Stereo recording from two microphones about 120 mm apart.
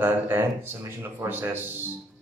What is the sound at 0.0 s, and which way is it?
Speech, 20° right (ahead or behind).